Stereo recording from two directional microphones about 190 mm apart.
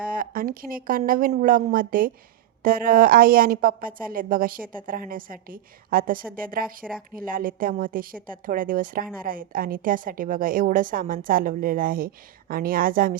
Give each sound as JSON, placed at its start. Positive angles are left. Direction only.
{"t": 0.1, "sound": "a woman's voice", "side_deg": -50}